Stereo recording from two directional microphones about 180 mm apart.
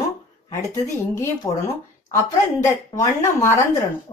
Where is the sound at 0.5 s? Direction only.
15° left (ahead or behind).